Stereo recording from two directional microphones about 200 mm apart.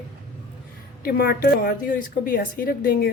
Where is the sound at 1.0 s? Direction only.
50° left (ahead or behind).